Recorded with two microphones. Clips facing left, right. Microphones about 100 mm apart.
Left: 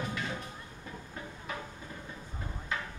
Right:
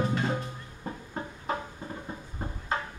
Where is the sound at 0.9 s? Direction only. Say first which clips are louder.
Right 8 dB; 40° right (ahead or behind).